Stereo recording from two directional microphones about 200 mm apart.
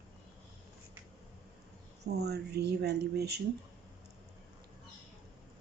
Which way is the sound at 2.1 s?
55° right (ahead or behind).